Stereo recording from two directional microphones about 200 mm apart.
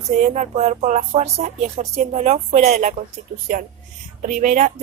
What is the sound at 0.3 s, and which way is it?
Speech, 35° right (ahead or behind).